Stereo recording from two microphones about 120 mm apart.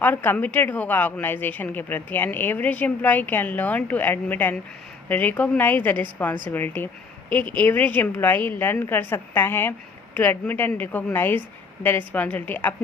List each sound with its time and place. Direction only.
0.0 s a woman's voice: 15° left (ahead or behind)